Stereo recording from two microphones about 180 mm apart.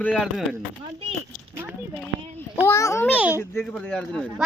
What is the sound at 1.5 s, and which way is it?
Speech, 10° right (ahead or behind).